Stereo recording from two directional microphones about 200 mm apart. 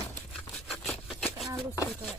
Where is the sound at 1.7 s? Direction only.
15° left (ahead or behind).